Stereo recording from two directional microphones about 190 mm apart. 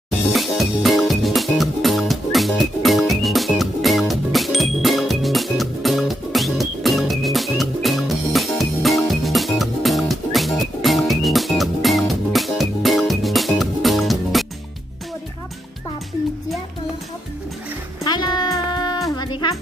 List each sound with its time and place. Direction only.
0.3 s music: centre (ahead or behind)
18.0 s music: 20° left (ahead or behind)